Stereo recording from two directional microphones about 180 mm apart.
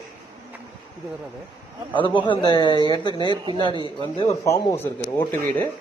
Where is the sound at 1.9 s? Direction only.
25° left (ahead or behind).